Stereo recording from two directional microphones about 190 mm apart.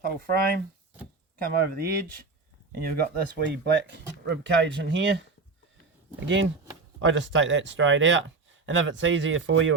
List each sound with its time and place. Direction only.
0.0 s speech: 50° right (ahead or behind)
6.2 s speech: 75° right (ahead or behind)